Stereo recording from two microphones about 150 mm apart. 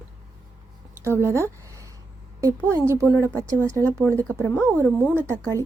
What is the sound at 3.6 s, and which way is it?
Speech, 20° right (ahead or behind).